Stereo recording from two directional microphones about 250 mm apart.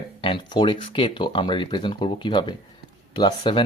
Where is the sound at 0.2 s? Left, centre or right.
Centre.